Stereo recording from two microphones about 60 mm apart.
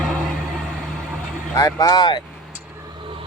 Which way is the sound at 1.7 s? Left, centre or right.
Left.